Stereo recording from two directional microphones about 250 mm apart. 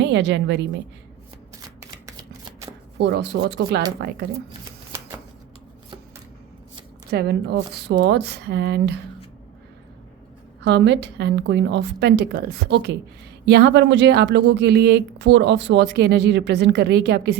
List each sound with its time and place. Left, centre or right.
0.0 s a woman's voice: right
2.0 s shuffling cards: centre
3.0 s speech: right
7.1 s speech: right
10.6 s speech: right